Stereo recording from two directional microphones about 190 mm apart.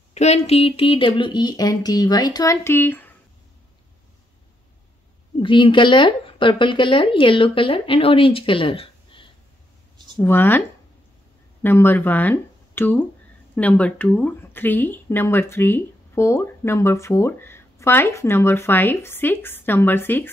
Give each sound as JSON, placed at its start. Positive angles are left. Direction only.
{"t": 0.1, "sound": "a woman's voice", "side_deg": 35}
{"t": 5.4, "sound": "a woman's voice", "side_deg": 25}
{"t": 10.1, "sound": "speech", "side_deg": 10}
{"t": 11.6, "sound": "speech", "side_deg": 10}